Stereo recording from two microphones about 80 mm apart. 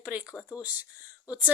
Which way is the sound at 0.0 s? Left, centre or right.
Centre.